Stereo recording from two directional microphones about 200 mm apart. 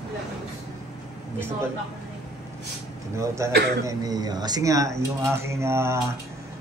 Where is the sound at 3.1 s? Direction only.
15° right (ahead or behind).